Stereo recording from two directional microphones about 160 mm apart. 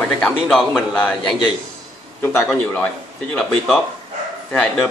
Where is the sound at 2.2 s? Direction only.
15° left (ahead or behind).